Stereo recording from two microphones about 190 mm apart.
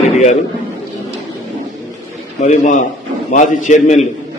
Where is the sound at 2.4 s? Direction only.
40° left (ahead or behind).